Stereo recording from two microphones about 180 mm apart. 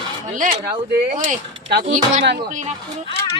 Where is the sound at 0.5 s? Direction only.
25° right (ahead or behind).